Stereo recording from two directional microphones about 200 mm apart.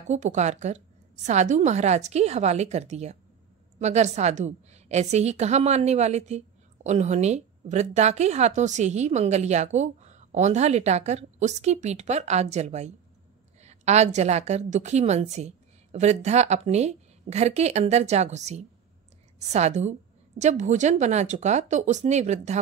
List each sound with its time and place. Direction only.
0.1 s a woman's voice: 35° right (ahead or behind)